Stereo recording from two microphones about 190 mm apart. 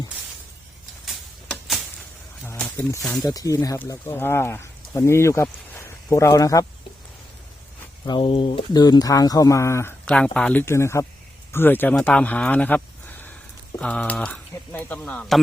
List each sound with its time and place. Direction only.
1.0 s a sound: centre (ahead or behind)
3.2 s speech: 20° left (ahead or behind)
8.0 s speech: 25° left (ahead or behind); by 15.4 s 5° left (ahead or behind)